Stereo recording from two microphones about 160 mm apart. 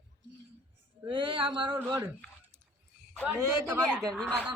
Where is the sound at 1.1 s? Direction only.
30° right (ahead or behind).